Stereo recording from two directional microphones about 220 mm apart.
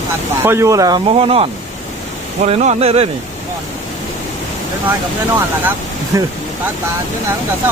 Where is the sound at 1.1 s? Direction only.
25° right (ahead or behind).